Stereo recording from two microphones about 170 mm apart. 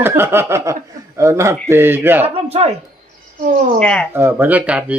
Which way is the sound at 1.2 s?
15° right (ahead or behind).